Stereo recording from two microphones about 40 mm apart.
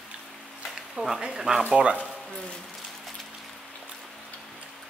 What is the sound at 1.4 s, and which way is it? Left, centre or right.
Speech, centre.